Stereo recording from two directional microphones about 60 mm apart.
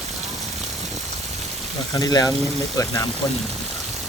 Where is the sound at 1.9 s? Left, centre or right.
Left.